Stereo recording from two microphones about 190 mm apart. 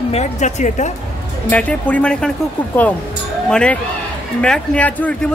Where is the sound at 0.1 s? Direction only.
35° left (ahead or behind).